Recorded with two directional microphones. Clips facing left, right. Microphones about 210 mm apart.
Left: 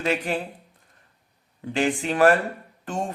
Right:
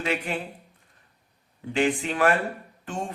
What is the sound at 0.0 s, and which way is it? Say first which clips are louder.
Speech: left 3 dB; 40° left (ahead or behind).